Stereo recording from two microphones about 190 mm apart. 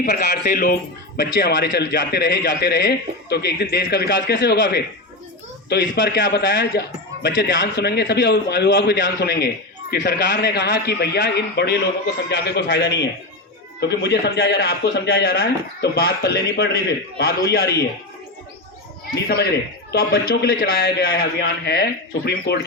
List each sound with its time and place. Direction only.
0.0 s a man's voice: 60° left (ahead or behind)
5.6 s a man's voice: 60° left (ahead or behind)
19.1 s a man's voice: 60° left (ahead or behind)